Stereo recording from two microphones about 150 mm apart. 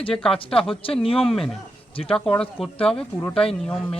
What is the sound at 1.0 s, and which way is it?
Speech, 40° left (ahead or behind).